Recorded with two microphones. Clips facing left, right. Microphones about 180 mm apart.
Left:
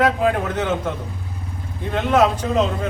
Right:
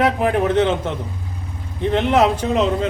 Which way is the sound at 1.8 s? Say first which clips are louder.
Right 2 dB; 20° right (ahead or behind).